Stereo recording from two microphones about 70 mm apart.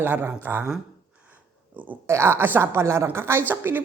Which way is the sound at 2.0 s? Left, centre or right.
Right.